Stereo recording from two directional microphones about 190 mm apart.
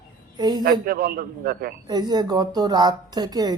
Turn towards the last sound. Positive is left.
turn(degrees=-20)  # may be behind; listen again after turning